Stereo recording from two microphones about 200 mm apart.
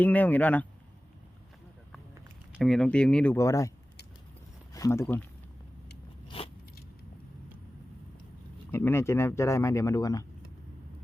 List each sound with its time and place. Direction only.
0.0 s speech: 10° left (ahead or behind)
2.6 s speech: centre (ahead or behind)
4.7 s speech: 15° left (ahead or behind)
6.2 s vehicle: 30° left (ahead or behind)
8.7 s speech: 10° left (ahead or behind)